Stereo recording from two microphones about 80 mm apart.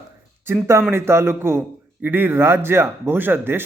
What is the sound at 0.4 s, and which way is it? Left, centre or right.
A man's voice, right.